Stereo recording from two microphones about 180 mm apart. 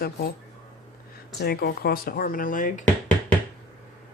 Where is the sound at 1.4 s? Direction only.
60° left (ahead or behind).